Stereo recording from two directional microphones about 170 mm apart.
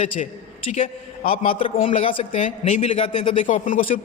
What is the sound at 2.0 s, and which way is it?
A man's voice, 35° left (ahead or behind).